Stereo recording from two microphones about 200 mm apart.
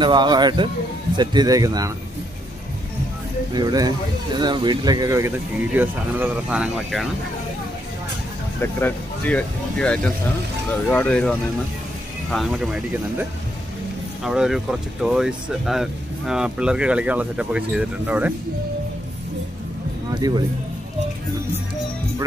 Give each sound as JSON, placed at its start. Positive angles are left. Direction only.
{"t": 0.0, "sound": "speech", "side_deg": -20}
{"t": 3.5, "sound": "speech", "side_deg": -20}
{"t": 8.5, "sound": "speech", "side_deg": 10}
{"t": 14.2, "sound": "speech", "side_deg": 0}
{"t": 20.1, "sound": "speech", "side_deg": -20}